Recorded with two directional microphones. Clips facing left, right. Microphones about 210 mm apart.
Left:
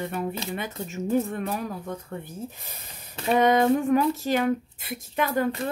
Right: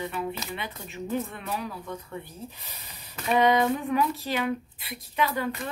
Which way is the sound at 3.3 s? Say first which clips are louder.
Left 3 dB; 45° left (ahead or behind).